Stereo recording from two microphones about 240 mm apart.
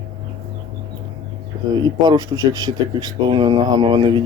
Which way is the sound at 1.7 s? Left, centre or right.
Centre.